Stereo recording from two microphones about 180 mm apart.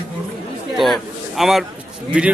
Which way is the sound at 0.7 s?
Centre (ahead or behind).